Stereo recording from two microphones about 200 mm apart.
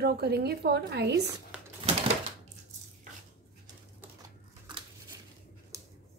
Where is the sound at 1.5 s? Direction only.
5° right (ahead or behind).